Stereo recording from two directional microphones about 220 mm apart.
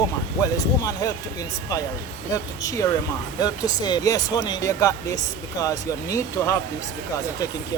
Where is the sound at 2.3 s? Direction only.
15° left (ahead or behind).